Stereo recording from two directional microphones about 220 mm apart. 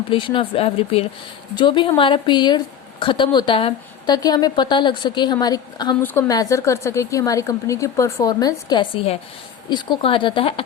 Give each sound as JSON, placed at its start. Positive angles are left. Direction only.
{"t": 0.1, "sound": "a woman's voice", "side_deg": 25}